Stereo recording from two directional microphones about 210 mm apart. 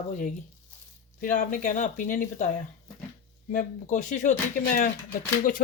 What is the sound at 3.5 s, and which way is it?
Speech, 35° left (ahead or behind).